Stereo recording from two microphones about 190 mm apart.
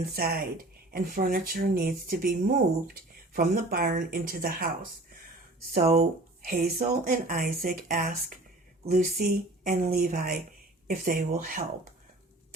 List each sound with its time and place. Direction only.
0.2 s speech: 50° right (ahead or behind)